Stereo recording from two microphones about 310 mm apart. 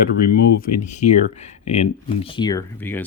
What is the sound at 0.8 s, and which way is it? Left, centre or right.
Speech, left.